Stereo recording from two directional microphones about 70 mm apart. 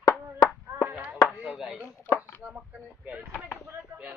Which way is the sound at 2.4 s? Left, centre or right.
Centre.